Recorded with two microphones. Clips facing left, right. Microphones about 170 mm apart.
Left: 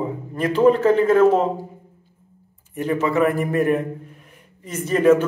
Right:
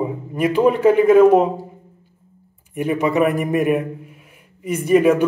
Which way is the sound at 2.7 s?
15° right (ahead or behind).